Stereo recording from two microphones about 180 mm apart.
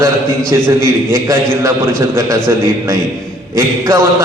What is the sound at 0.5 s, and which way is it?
A man's voice, 15° right (ahead or behind).